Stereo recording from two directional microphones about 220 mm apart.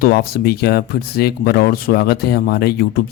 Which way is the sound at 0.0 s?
45° left (ahead or behind).